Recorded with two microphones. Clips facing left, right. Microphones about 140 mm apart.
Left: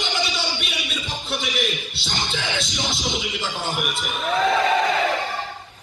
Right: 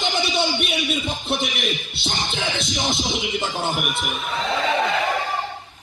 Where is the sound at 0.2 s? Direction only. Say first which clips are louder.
Right 5 dB; 55° right (ahead or behind).